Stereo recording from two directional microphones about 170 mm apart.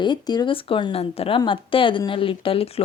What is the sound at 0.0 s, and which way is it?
Speech, 25° left (ahead or behind).